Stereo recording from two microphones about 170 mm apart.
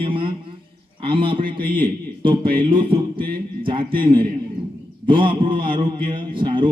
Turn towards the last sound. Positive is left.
turn(degrees=-30)  # may be behind; listen again after turning